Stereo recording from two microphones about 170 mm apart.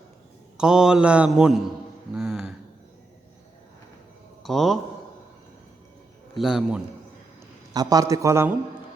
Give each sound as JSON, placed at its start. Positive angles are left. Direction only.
{"t": 0.5, "sound": "mantra", "side_deg": -5}
{"t": 2.1, "sound": "a sound", "side_deg": -5}
{"t": 4.4, "sound": "mantra", "side_deg": 0}
{"t": 6.3, "sound": "mantra", "side_deg": 0}
{"t": 7.7, "sound": "a man's voice", "side_deg": -20}